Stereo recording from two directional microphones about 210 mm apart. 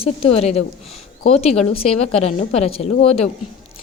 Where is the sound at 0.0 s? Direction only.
30° left (ahead or behind).